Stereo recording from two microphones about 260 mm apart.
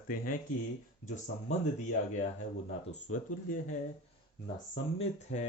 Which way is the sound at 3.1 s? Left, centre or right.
Left.